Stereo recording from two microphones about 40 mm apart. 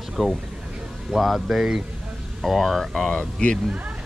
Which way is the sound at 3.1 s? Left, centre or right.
Left.